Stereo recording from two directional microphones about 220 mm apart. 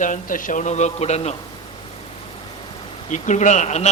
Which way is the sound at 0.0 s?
35° left (ahead or behind).